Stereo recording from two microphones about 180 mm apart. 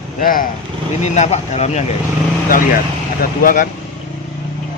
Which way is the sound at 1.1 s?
40° left (ahead or behind).